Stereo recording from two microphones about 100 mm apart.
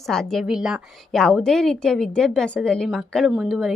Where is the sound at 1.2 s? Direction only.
5° left (ahead or behind).